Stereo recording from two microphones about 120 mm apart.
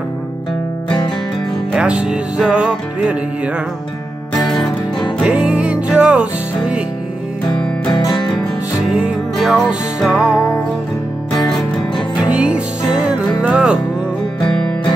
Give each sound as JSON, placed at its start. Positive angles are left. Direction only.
{"t": 1.7, "sound": "music", "side_deg": -5}
{"t": 5.2, "sound": "music", "side_deg": -10}
{"t": 7.9, "sound": "music", "side_deg": 35}
{"t": 8.8, "sound": "music", "side_deg": -5}
{"t": 12.2, "sound": "music", "side_deg": -10}